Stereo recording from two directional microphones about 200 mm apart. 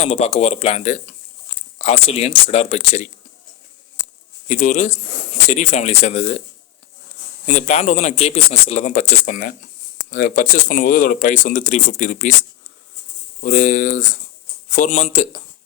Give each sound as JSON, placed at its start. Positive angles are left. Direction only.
{"t": 0.0, "sound": "speech", "side_deg": 30}
{"t": 4.4, "sound": "speech", "side_deg": 35}
{"t": 7.4, "sound": "speech", "side_deg": 35}
{"t": 13.4, "sound": "speech", "side_deg": 40}